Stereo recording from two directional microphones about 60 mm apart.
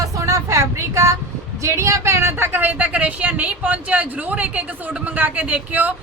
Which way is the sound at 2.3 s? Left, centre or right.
Right.